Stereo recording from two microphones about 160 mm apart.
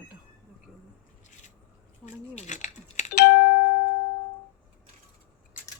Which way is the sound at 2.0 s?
50° left (ahead or behind).